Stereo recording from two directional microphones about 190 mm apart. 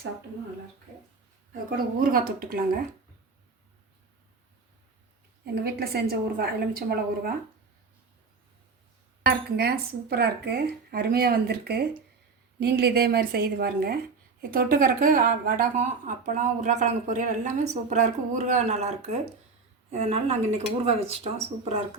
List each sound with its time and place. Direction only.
1.7 s a woman's voice: 50° right (ahead or behind)
5.6 s a woman's voice: 55° right (ahead or behind)
9.2 s a woman's voice: 55° right (ahead or behind); by 21.2 s 35° right (ahead or behind)